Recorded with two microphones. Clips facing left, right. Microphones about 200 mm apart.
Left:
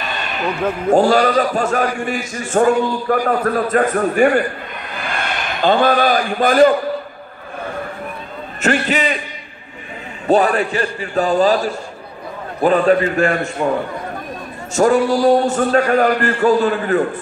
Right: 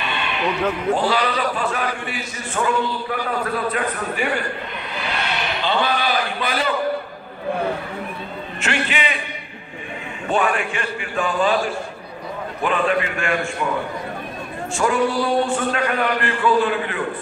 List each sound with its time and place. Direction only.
0.0 s a man's voice: 40° left (ahead or behind)
4.9 s a sound: 50° left (ahead or behind)
8.5 s a man's voice: 40° left (ahead or behind)
10.2 s a man's voice: 35° left (ahead or behind)
12.6 s a man's voice: 40° left (ahead or behind)
14.7 s a man's voice: 40° left (ahead or behind)